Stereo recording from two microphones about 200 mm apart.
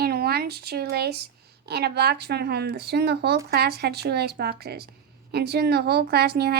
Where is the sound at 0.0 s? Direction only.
50° right (ahead or behind).